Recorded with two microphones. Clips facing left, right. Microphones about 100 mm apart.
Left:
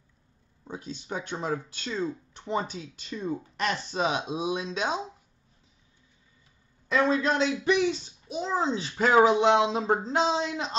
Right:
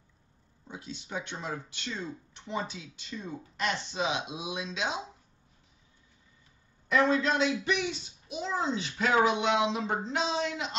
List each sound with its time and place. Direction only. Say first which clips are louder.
0.7 s speech: left 5 dB; 40° left (ahead or behind)
6.9 s a man's voice: left 1 dB; 30° left (ahead or behind)